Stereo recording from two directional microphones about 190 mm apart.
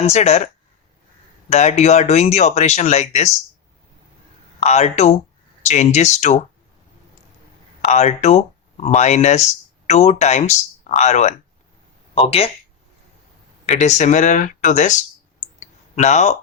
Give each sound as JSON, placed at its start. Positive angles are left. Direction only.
{"t": 0.0, "sound": "speech", "side_deg": 35}
{"t": 1.5, "sound": "speech", "side_deg": 35}
{"t": 4.6, "sound": "speech", "side_deg": 35}
{"t": 7.8, "sound": "speech", "side_deg": 35}
{"t": 13.7, "sound": "speech", "side_deg": 40}
{"t": 15.6, "sound": "a sound", "side_deg": 40}